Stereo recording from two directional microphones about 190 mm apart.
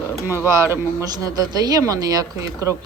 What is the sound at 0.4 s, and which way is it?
Speech, 15° right (ahead or behind).